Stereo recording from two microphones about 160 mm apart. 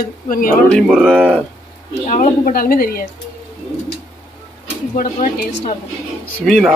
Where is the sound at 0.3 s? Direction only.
60° left (ahead or behind).